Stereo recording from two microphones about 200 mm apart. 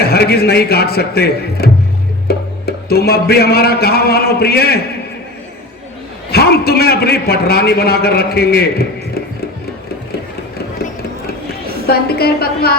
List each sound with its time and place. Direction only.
0.0 s a man's voice: 50° left (ahead or behind)
2.2 s music: 50° left (ahead or behind)
6.3 s a man's voice: 50° left (ahead or behind)
11.9 s a man's voice: 50° left (ahead or behind)